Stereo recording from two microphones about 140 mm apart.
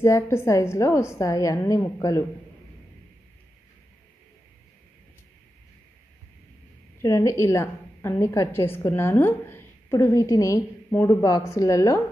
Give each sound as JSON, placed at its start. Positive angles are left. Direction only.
{"t": 0.0, "sound": "a woman's voice", "side_deg": 20}
{"t": 7.0, "sound": "a woman's voice", "side_deg": 20}